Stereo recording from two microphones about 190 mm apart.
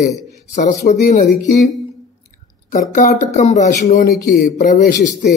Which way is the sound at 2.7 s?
45° left (ahead or behind).